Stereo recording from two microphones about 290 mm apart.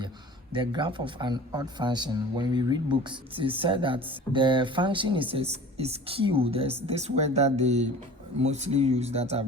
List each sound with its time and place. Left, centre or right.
0.5 s speech: centre